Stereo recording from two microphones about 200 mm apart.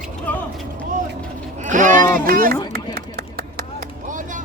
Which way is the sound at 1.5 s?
40° right (ahead or behind).